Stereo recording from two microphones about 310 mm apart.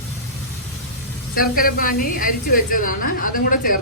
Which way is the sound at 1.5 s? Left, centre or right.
Left.